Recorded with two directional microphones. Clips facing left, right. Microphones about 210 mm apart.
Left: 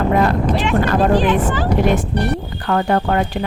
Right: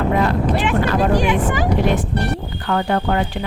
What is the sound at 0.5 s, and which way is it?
Speech, 5° right (ahead or behind).